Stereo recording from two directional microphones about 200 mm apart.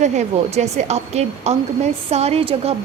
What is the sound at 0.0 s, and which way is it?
A woman's voice, 35° right (ahead or behind).